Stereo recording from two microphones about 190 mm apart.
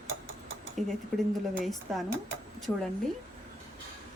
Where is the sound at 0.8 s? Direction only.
40° right (ahead or behind).